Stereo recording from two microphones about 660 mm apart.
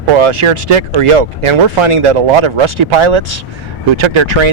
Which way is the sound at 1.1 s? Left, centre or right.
Right.